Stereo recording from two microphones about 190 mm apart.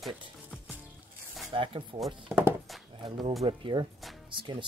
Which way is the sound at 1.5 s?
25° right (ahead or behind).